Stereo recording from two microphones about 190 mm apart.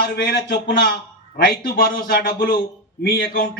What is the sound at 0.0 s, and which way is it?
A man's voice, 55° left (ahead or behind).